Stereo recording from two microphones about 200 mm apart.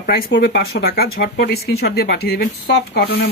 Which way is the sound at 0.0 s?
50° left (ahead or behind).